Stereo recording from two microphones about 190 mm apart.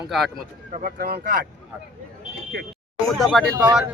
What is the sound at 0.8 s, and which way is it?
Speech, 50° right (ahead or behind).